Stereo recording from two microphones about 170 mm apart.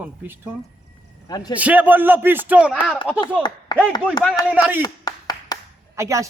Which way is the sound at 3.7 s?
25° left (ahead or behind).